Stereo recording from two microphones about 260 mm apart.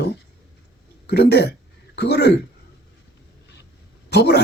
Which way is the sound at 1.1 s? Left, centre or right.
Left.